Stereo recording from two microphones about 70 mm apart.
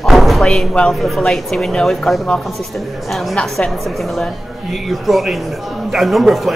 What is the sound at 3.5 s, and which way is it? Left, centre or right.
A man's voice, centre.